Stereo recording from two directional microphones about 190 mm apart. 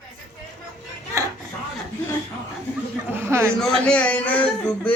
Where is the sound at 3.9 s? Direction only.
5° left (ahead or behind).